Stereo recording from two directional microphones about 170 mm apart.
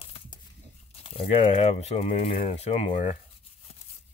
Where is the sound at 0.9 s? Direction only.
35° left (ahead or behind).